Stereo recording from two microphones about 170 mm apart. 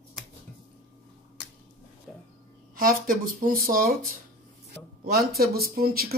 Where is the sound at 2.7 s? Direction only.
55° right (ahead or behind).